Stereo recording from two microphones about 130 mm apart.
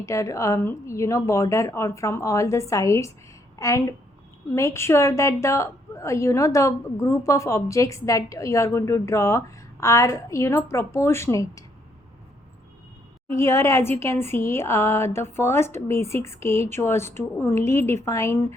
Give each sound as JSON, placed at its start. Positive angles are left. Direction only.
{"t": 0.0, "sound": "speech", "side_deg": 25}
{"t": 13.2, "sound": "speech", "side_deg": 20}